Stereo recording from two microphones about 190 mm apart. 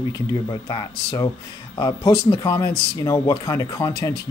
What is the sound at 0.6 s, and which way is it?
Speech, 20° left (ahead or behind).